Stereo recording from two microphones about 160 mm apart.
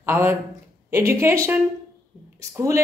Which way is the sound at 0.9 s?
15° right (ahead or behind).